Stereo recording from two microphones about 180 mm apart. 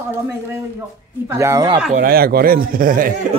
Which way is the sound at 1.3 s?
15° right (ahead or behind).